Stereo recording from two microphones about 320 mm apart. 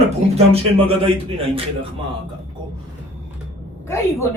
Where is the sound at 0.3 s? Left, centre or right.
Centre.